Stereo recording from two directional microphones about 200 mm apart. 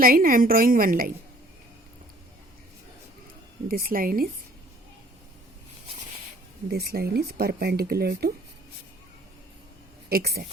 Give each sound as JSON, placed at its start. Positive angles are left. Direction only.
{"t": 0.0, "sound": "speech", "side_deg": -45}
{"t": 3.7, "sound": "speech", "side_deg": -45}
{"t": 6.7, "sound": "speech", "side_deg": -50}
{"t": 10.1, "sound": "speech", "side_deg": -50}